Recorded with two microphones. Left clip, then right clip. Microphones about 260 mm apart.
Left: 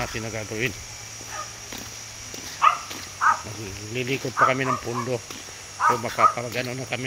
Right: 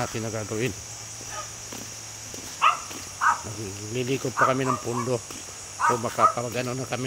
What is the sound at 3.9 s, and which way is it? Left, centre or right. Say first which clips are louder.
Speech: left 1 dB; centre.